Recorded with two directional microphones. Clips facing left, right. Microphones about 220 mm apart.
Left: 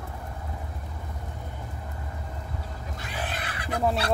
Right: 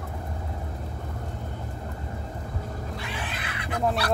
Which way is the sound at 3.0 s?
40° left (ahead or behind).